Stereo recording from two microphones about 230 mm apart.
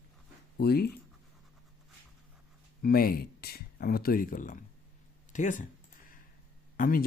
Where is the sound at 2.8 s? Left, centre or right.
Left.